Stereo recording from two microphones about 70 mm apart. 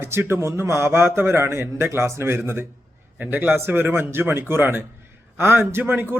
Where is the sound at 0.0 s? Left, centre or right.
Right.